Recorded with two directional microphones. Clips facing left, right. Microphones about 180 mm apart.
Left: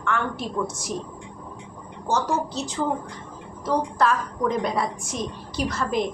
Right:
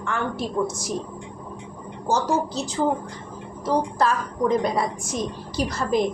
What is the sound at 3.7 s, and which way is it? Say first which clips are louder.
A woman's voice: even; 35° right (ahead or behind).